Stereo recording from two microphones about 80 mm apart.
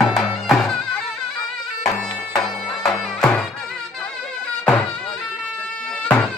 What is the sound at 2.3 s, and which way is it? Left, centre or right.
Music, centre.